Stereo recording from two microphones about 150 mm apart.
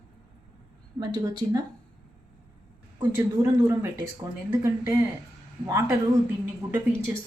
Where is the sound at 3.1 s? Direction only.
15° right (ahead or behind).